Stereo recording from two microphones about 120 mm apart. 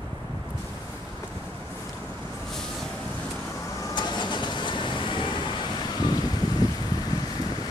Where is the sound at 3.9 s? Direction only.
40° left (ahead or behind).